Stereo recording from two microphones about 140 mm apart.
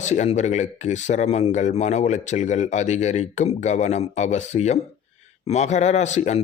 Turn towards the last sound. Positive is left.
turn(degrees=55)  # may be behind; listen again after turning